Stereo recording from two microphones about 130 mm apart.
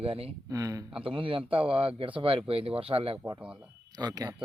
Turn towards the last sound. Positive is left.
turn(degrees=-30)  # may be behind; listen again after turning